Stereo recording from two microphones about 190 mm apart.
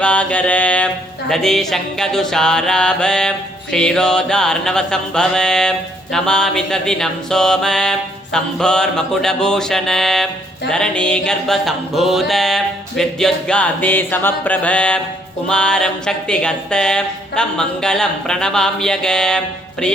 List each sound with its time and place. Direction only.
0.0 s mantra: 5° left (ahead or behind)
1.3 s music: centre (ahead or behind)